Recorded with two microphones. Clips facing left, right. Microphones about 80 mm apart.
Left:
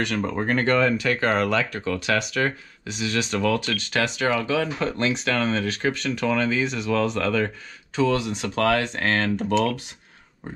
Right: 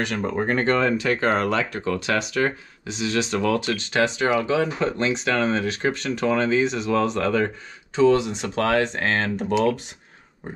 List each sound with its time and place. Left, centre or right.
0.0 s speech: centre
0.4 s speech: right